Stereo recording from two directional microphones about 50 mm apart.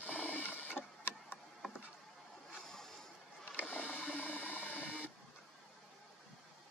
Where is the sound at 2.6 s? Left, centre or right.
Centre.